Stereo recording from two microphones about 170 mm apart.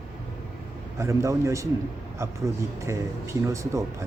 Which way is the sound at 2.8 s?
15° right (ahead or behind).